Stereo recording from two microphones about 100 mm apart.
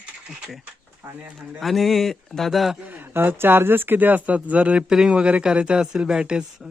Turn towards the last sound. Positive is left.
turn(degrees=-10)  # may be behind; listen again after turning